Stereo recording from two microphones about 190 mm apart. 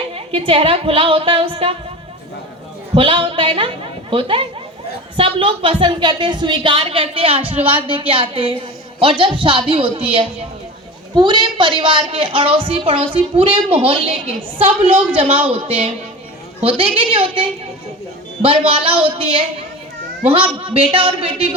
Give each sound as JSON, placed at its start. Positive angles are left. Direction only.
{"t": 0.1, "sound": "a woman's voice", "side_deg": -30}
{"t": 2.9, "sound": "a woman's voice", "side_deg": -30}
{"t": 7.6, "sound": "a woman's voice", "side_deg": -10}
{"t": 7.9, "sound": "a woman's voice", "side_deg": -25}
{"t": 18.4, "sound": "a woman's voice", "side_deg": -30}